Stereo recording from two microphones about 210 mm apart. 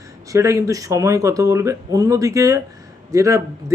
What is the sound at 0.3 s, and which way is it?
A man's voice, 15° right (ahead or behind).